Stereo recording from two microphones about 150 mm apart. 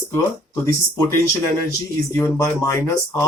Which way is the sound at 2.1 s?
20° left (ahead or behind).